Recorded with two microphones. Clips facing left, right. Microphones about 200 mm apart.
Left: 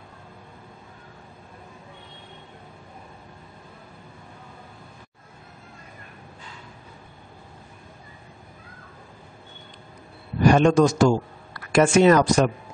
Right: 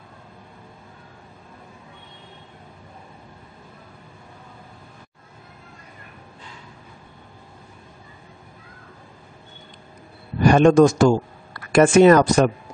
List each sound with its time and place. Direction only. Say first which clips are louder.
10.5 s speech: right 5 dB; 50° right (ahead or behind)